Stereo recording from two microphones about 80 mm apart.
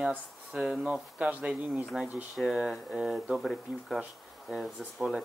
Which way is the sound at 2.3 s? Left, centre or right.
Centre.